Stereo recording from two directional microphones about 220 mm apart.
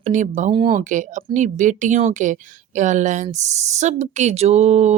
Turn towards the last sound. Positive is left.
turn(degrees=-30)  # may be behind; listen again after turning